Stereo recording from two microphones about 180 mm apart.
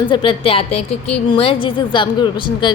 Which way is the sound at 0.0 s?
25° left (ahead or behind).